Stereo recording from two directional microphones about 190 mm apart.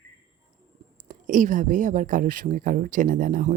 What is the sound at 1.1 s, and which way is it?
Speech, 45° right (ahead or behind).